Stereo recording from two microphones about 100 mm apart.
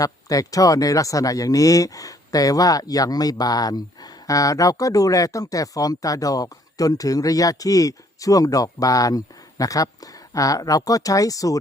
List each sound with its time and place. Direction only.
0.0 s speech: 35° left (ahead or behind)